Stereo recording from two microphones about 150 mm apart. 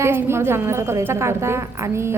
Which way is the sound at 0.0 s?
15° right (ahead or behind).